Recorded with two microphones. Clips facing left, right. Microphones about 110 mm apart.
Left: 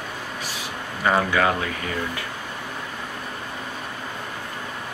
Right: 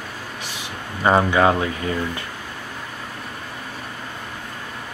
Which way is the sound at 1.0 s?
25° right (ahead or behind).